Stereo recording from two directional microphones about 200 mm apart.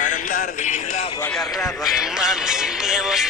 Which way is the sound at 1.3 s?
Centre (ahead or behind).